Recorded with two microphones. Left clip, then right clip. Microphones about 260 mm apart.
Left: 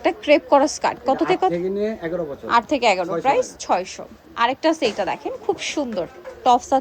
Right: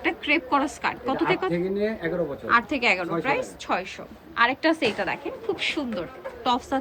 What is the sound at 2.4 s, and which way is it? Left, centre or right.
A woman's voice, left.